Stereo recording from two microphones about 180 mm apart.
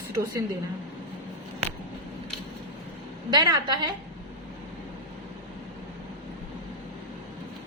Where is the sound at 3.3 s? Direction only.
25° right (ahead or behind).